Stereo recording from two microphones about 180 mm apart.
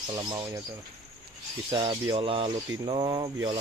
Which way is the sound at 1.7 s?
25° right (ahead or behind).